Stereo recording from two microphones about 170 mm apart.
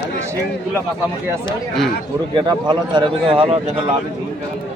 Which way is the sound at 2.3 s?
25° right (ahead or behind).